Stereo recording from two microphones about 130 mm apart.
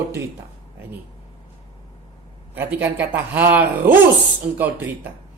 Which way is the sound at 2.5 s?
15° right (ahead or behind).